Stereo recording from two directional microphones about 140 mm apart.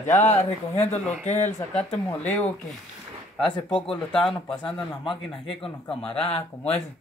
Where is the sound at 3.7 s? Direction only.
5° left (ahead or behind).